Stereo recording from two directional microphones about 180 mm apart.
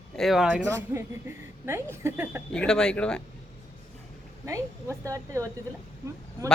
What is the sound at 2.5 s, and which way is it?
Speech, 5° left (ahead or behind).